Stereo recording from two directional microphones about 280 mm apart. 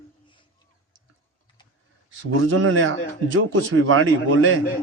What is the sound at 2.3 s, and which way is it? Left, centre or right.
A man's voice, right.